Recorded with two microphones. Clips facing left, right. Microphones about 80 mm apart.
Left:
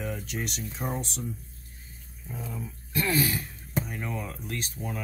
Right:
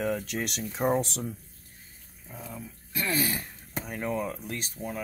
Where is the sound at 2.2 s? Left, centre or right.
Centre.